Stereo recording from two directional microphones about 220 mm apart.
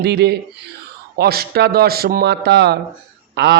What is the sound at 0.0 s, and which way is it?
Speech, 50° right (ahead or behind).